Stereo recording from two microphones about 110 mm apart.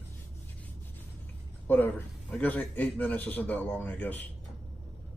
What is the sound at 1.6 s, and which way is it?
A man's voice, 20° left (ahead or behind).